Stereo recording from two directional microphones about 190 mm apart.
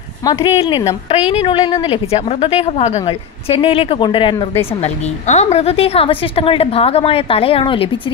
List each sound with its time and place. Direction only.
0.2 s a woman's voice: 20° left (ahead or behind)